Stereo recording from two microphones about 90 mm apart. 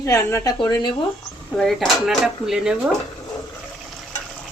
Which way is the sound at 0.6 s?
55° left (ahead or behind).